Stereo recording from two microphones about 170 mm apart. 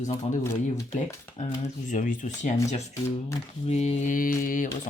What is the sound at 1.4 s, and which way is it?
Speech, 45° left (ahead or behind).